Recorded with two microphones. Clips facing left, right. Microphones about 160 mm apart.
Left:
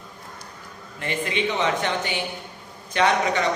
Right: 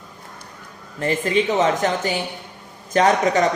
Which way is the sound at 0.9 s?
40° right (ahead or behind).